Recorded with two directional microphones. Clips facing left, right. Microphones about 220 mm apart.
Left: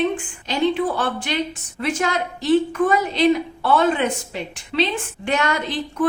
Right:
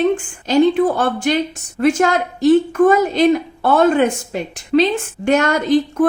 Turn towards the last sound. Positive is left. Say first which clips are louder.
# right 8 dB
turn(degrees=-45)  # may be behind; listen again after turning